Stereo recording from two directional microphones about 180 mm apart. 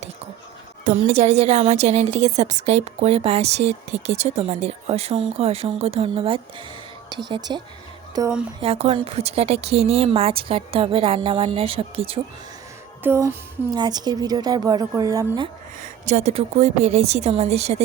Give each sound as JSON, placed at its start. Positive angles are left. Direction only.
{"t": 0.9, "sound": "a woman's voice", "side_deg": -40}
{"t": 8.6, "sound": "a woman's voice", "side_deg": -35}
{"t": 13.0, "sound": "music", "side_deg": -15}
{"t": 13.7, "sound": "a woman's voice", "side_deg": -20}
{"t": 16.0, "sound": "a woman's voice", "side_deg": -40}